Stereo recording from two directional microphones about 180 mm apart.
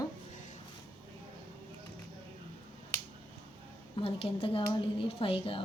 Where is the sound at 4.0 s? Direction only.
30° left (ahead or behind).